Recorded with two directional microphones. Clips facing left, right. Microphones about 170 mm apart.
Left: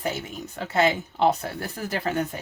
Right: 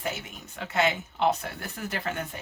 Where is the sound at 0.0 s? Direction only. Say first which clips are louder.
Left 5 dB; 35° left (ahead or behind).